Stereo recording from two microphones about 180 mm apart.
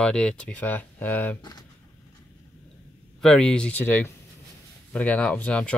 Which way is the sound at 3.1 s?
5° left (ahead or behind).